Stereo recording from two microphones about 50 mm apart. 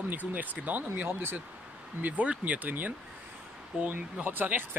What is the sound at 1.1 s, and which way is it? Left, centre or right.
Speech, right.